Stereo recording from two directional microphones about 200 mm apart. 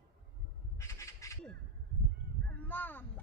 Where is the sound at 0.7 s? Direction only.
15° left (ahead or behind).